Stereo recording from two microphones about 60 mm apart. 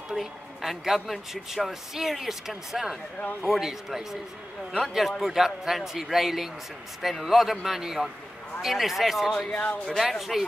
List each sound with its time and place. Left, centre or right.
0.1 s a woman's voice: centre
9.5 s speech: left
9.9 s a woman's voice: centre